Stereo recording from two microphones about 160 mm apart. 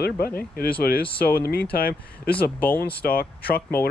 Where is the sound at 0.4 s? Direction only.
70° left (ahead or behind).